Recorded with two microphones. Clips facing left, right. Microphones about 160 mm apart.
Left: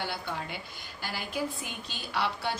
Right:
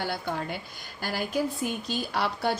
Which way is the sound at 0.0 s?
45° right (ahead or behind).